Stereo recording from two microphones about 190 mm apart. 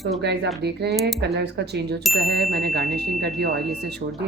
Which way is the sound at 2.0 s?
Centre (ahead or behind).